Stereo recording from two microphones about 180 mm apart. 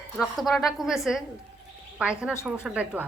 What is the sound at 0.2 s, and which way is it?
Speech, centre (ahead or behind).